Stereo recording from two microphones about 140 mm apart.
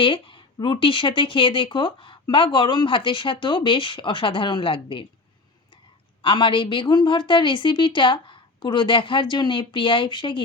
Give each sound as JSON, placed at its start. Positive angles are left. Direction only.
{"t": 0.0, "sound": "speech", "side_deg": 35}
{"t": 6.2, "sound": "speech", "side_deg": 35}